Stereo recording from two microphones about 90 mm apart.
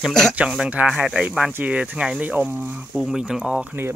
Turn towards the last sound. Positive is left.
turn(degrees=-10)  # may be behind; listen again after turning